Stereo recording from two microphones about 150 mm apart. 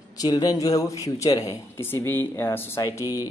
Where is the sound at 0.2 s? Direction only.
25° left (ahead or behind).